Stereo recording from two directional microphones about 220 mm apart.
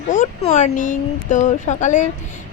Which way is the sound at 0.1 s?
35° left (ahead or behind).